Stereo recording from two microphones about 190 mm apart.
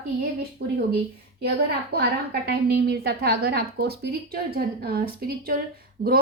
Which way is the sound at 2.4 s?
60° right (ahead or behind).